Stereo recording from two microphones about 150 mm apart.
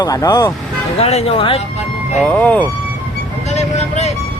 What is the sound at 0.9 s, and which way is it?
Speech, 45° left (ahead or behind).